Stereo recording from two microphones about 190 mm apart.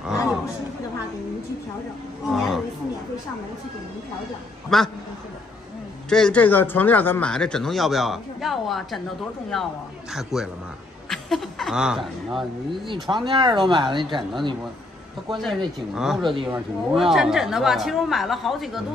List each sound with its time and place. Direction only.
2.3 s speech: centre (ahead or behind)
4.6 s speech: centre (ahead or behind)
6.0 s speech: 5° left (ahead or behind)
13.1 s speech: 25° right (ahead or behind)
15.4 s speech: centre (ahead or behind)
16.2 s speech: 25° right (ahead or behind)
16.4 s speech: 10° right (ahead or behind)